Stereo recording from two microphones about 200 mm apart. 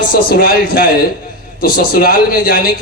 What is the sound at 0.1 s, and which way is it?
A man's voice, 45° left (ahead or behind).